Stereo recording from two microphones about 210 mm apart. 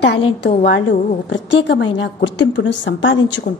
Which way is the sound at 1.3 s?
60° left (ahead or behind).